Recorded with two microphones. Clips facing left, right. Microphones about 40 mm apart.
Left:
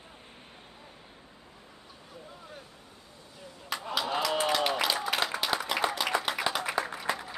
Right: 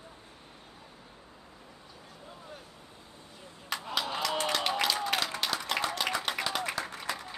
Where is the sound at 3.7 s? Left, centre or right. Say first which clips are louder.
Left 2 dB; centre.